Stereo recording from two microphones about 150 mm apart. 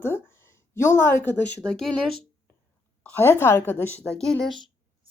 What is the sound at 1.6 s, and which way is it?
Speech, centre (ahead or behind).